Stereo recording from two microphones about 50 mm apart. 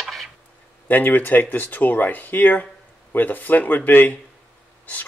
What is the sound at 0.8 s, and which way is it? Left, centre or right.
Speech, left.